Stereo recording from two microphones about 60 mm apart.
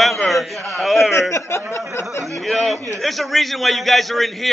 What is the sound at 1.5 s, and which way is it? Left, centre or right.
Speech, left.